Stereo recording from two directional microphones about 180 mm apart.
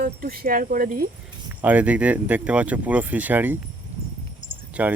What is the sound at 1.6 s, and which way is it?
Speech, 10° right (ahead or behind).